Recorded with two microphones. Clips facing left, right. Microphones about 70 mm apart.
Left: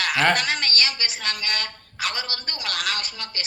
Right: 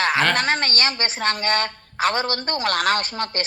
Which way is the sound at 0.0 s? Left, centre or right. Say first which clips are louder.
Right 3 dB; right.